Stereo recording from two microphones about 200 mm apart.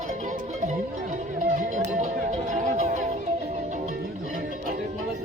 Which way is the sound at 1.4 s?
40° right (ahead or behind).